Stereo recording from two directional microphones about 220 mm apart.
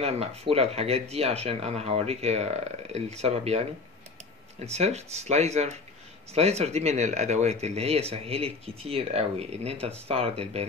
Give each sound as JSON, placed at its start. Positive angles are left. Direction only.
{"t": 0.0, "sound": "speech", "side_deg": -25}
{"t": 4.7, "sound": "speech", "side_deg": -30}